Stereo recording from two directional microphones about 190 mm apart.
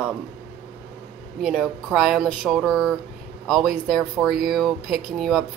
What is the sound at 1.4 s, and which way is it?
Speech, centre (ahead or behind).